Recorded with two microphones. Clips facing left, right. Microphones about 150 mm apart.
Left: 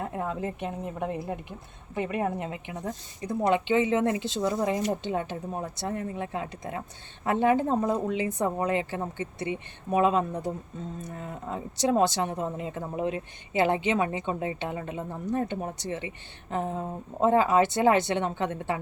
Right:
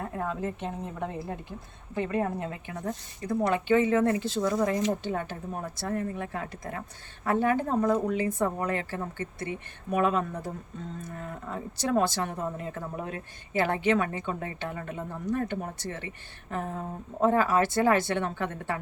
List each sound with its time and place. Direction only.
0.0 s speech: 20° left (ahead or behind)